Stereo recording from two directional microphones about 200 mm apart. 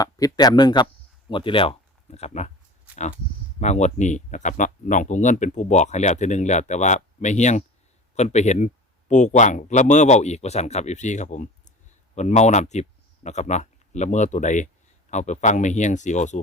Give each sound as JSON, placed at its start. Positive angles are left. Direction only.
{"t": 0.0, "sound": "speech", "side_deg": 20}
{"t": 2.9, "sound": "a sound", "side_deg": 35}
{"t": 3.6, "sound": "speech", "side_deg": 35}